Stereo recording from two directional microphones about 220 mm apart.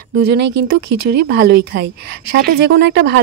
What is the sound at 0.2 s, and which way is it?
Speech, 45° right (ahead or behind).